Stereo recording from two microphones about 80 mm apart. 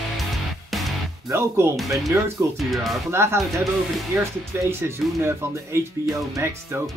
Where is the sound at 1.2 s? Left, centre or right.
Right.